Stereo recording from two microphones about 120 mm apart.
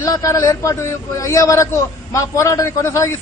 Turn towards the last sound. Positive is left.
turn(degrees=25)  # may be behind; listen again after turning